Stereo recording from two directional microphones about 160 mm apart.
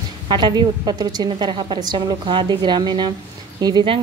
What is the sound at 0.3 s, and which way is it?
A woman's voice, 25° right (ahead or behind).